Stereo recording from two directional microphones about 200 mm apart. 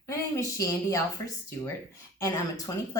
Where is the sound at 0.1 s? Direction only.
15° left (ahead or behind).